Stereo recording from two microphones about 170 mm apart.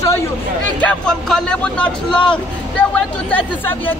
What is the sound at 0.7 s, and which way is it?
Speech, 5° left (ahead or behind).